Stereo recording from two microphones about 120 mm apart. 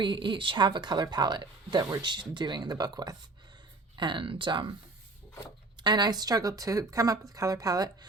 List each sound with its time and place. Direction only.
0.0 s speech: 40° right (ahead or behind)
5.7 s speech: 40° right (ahead or behind)